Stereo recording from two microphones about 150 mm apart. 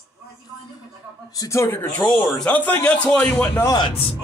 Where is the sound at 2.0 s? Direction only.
5° left (ahead or behind).